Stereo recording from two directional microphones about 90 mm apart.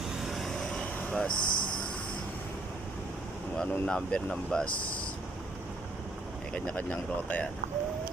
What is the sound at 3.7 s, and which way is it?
Speech, 10° left (ahead or behind).